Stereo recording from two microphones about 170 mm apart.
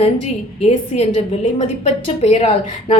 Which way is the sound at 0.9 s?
35° left (ahead or behind).